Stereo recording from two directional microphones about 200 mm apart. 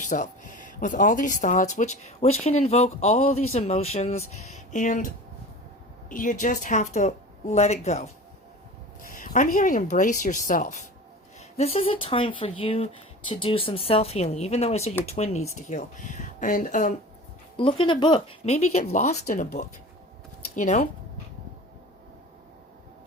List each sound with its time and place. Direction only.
0.0 s speech: 40° left (ahead or behind)
17.6 s speech: 25° left (ahead or behind)